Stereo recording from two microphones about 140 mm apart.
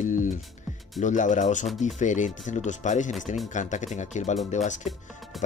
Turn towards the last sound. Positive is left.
turn(degrees=60)  # may be behind; listen again after turning